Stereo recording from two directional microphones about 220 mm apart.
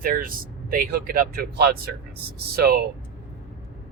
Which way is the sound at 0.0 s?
40° right (ahead or behind).